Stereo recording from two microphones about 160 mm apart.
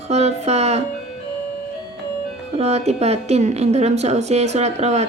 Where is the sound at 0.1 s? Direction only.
45° right (ahead or behind).